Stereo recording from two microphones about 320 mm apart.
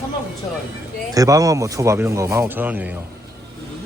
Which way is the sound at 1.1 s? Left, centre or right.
Centre.